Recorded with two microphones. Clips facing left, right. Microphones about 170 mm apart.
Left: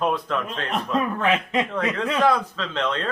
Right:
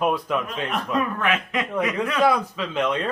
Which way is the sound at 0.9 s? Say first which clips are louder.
Left 2 dB; 30° left (ahead or behind).